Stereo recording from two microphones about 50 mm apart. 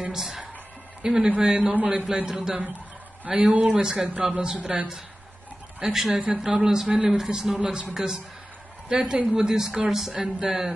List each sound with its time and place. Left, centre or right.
0.1 s a woman's voice: centre; by 2.0 s right
2.2 s a woman's voice: centre
3.5 s a man's voice: right
5.9 s a woman's voice: centre